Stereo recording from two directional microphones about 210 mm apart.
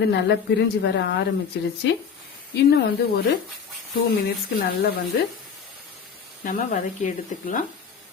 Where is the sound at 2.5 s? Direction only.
55° left (ahead or behind).